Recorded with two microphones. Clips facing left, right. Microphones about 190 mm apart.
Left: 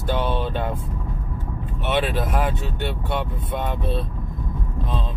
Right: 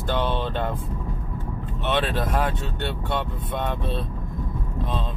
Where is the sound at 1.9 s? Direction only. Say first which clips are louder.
Left 1 dB; 5° left (ahead or behind).